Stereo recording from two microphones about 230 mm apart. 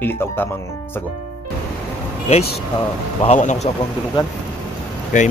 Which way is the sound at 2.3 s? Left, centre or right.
Left.